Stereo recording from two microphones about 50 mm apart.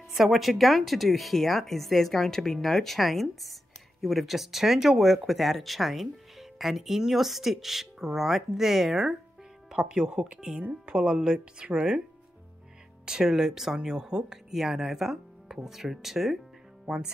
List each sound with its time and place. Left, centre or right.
0.1 s speech: centre
13.0 s speech: centre